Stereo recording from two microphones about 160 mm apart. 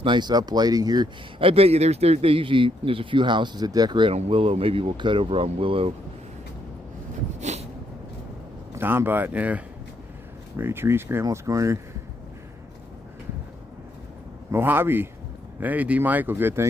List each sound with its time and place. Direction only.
0.0 s speech: 30° right (ahead or behind)
7.3 s a sound: 45° right (ahead or behind)
8.7 s speech: 15° right (ahead or behind)
14.5 s speech: 15° right (ahead or behind)